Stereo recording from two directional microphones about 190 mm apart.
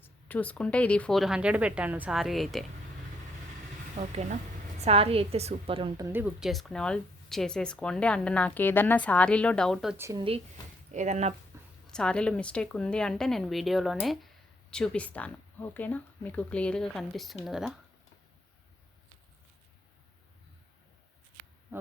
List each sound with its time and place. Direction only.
0.0 s speech: 10° left (ahead or behind)
3.9 s a woman's voice: 35° right (ahead or behind)
6.1 s speech: 10° right (ahead or behind)
10.0 s speech: 15° right (ahead or behind)
10.9 s a woman's voice: 35° right (ahead or behind)
11.9 s speech: 5° left (ahead or behind)
21.7 s a sound: 10° right (ahead or behind)